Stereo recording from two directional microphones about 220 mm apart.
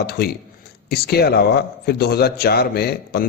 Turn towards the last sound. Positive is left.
turn(degrees=45)  # may be behind; listen again after turning